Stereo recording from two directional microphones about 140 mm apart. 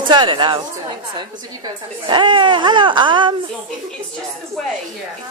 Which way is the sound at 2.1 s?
35° right (ahead or behind).